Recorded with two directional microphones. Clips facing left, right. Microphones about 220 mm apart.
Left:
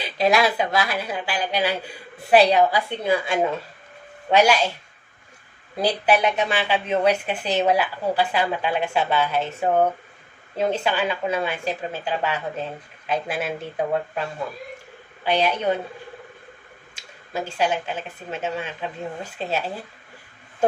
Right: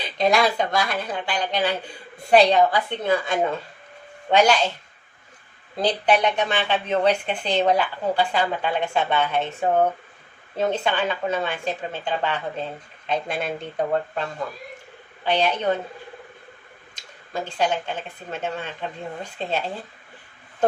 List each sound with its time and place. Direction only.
0.0 s a woman's voice: 5° left (ahead or behind)
5.7 s a woman's voice: 10° left (ahead or behind)
16.9 s a woman's voice: 10° left (ahead or behind)